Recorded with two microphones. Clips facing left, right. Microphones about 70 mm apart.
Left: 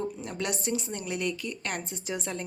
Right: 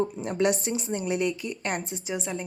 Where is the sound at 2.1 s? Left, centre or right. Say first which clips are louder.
Right 2 dB; centre.